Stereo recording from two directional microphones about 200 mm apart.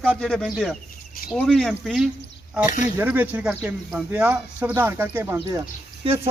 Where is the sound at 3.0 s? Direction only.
10° right (ahead or behind).